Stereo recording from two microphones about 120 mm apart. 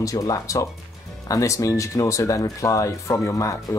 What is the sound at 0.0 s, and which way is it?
Speech, 30° left (ahead or behind).